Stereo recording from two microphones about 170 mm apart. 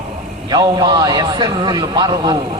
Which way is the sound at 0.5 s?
25° right (ahead or behind).